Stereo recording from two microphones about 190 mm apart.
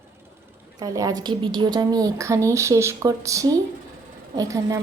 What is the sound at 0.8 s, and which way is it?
A woman's voice, 15° right (ahead or behind).